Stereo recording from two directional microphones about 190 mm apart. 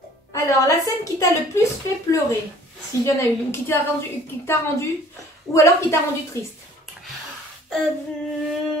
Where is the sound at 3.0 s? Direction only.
15° left (ahead or behind).